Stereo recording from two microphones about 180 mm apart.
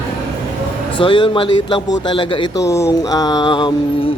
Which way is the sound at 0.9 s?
30° left (ahead or behind).